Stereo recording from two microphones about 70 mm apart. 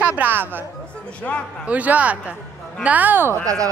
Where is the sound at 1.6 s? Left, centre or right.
Right.